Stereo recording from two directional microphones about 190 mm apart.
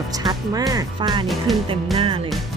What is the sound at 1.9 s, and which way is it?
Speech, 30° right (ahead or behind).